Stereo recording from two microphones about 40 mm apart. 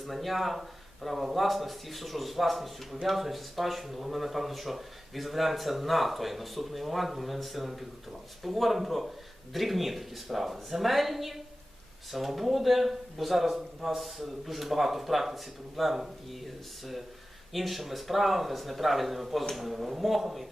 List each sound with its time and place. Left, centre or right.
0.0 s a man's voice: centre
17.5 s a man's voice: centre